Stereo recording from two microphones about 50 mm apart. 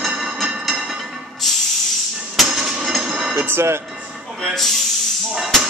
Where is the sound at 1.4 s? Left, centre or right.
Centre.